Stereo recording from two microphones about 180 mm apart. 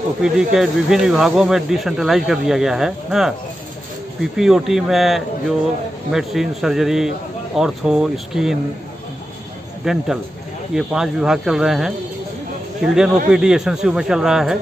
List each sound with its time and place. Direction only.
0.2 s speech: 5° right (ahead or behind)
9.8 s speech: centre (ahead or behind)
13.3 s speech: 5° right (ahead or behind)